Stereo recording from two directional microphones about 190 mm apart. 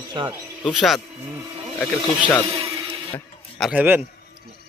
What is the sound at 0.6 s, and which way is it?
Speech, centre (ahead or behind).